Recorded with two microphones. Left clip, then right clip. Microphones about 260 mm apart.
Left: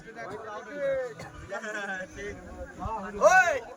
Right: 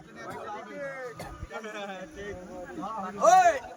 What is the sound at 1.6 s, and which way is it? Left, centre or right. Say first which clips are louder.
Speech: left 5 dB; centre.